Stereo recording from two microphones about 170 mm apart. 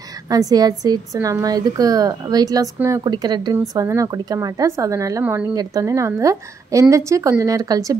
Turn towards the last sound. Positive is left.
turn(degrees=-20)  # may be behind; listen again after turning